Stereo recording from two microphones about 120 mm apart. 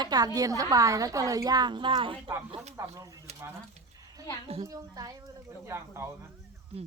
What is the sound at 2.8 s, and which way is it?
Speech, 25° right (ahead or behind).